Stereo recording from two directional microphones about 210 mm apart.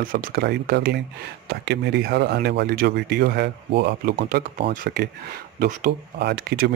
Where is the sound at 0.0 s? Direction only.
40° right (ahead or behind).